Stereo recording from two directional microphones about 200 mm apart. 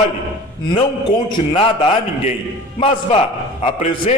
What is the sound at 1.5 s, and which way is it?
Speech, 30° left (ahead or behind).